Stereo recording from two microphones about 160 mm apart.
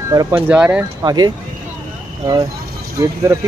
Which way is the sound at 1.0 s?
25° right (ahead or behind).